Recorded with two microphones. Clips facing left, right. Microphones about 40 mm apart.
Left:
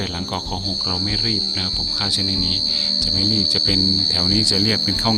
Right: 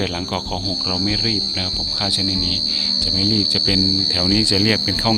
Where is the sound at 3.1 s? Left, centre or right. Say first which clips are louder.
Right 2 dB; centre.